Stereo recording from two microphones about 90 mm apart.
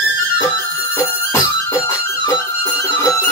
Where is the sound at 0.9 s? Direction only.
30° left (ahead or behind).